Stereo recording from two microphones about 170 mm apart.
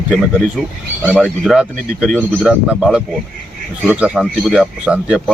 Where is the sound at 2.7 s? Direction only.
5° right (ahead or behind).